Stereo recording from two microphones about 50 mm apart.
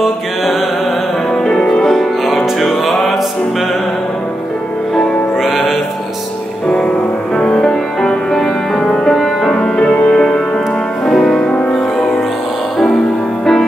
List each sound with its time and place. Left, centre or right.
1.3 s music: centre
1.9 s music: centre
5.4 s music: centre
7.3 s music: centre
9.6 s music: left
11.1 s music: centre